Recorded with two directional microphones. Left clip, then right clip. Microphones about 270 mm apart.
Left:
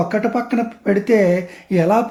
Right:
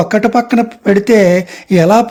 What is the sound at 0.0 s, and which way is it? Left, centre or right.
Speech, right.